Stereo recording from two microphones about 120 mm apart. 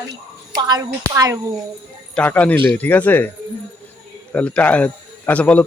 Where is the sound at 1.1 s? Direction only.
25° right (ahead or behind).